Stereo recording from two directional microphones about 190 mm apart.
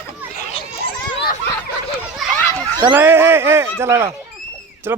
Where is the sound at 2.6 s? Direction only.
20° right (ahead or behind).